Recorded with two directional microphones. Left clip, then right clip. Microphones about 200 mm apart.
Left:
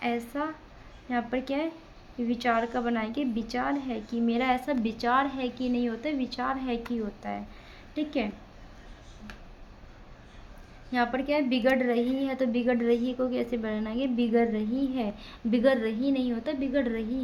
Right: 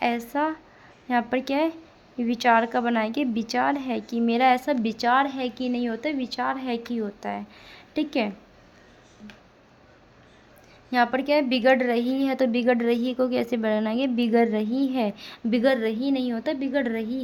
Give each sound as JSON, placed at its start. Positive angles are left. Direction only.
{"t": 0.0, "sound": "a woman's voice", "side_deg": -40}
{"t": 10.9, "sound": "a woman's voice", "side_deg": -40}